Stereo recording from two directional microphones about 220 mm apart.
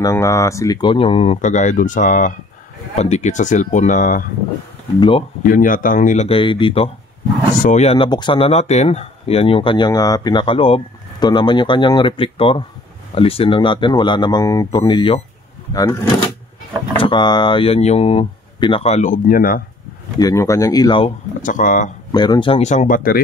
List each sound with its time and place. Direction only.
0.0 s speech: 15° left (ahead or behind); by 4.3 s 35° left (ahead or behind)
5.4 s speech: 40° left (ahead or behind); by 16.0 s 15° left (ahead or behind)
17.0 s speech: 20° left (ahead or behind); by 19.6 s 40° left (ahead or behind)
20.2 s speech: 15° left (ahead or behind)
21.4 s speech: 35° left (ahead or behind)
22.1 s speech: 20° left (ahead or behind); by 23.2 s 40° left (ahead or behind)